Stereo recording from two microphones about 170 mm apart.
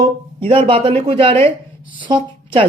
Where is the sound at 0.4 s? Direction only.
35° right (ahead or behind).